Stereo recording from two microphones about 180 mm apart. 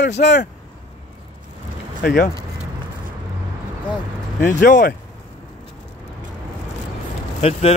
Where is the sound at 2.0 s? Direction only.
65° left (ahead or behind).